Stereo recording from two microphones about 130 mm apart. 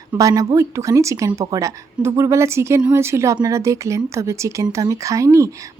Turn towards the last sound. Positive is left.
turn(degrees=-25)  # may be behind; listen again after turning